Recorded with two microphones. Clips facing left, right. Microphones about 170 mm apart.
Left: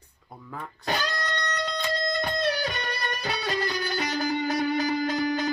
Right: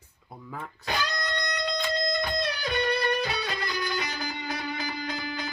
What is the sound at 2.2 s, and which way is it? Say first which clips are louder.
Music: left 3 dB; 40° left (ahead or behind).